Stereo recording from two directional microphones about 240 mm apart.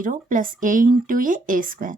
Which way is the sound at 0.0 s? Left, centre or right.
Right.